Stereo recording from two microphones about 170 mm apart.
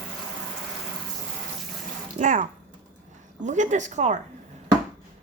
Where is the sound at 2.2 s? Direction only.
50° right (ahead or behind).